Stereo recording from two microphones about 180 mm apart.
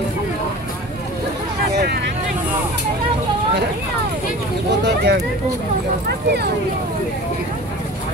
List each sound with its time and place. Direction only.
4.8 s speech: 70° right (ahead or behind)